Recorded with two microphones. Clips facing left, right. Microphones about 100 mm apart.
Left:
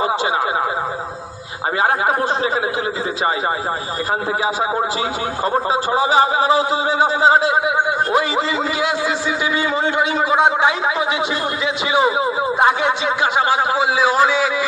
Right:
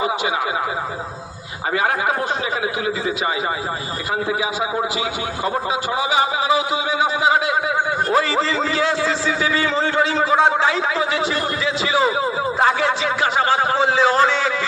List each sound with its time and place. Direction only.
1.8 s speech: 30° left (ahead or behind)
5.9 s speech: 35° left (ahead or behind)
8.1 s a man's voice: 15° left (ahead or behind)